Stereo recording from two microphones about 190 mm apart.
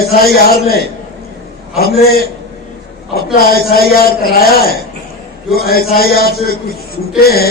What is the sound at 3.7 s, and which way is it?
A man's voice, 55° left (ahead or behind).